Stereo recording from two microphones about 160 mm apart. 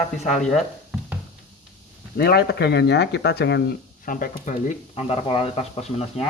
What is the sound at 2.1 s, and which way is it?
Speech, 75° left (ahead or behind).